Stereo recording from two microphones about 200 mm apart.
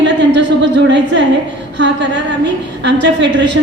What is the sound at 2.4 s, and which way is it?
Speech, 60° right (ahead or behind).